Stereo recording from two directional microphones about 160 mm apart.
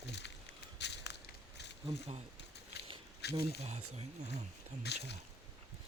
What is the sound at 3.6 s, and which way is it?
Speech, 40° right (ahead or behind).